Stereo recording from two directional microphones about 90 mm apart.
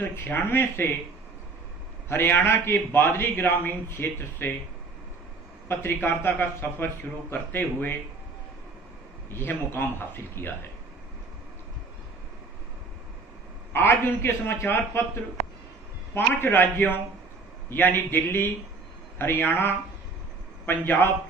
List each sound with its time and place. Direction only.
0.1 s a man's voice: 25° left (ahead or behind)
2.0 s a man's voice: 25° left (ahead or behind)
5.7 s a man's voice: 25° left (ahead or behind)
9.3 s a man's voice: 25° left (ahead or behind)
13.7 s a man's voice: 25° left (ahead or behind)
16.2 s a man's voice: 25° left (ahead or behind)